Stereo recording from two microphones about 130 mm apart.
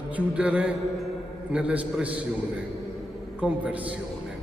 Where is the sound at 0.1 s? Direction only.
10° right (ahead or behind).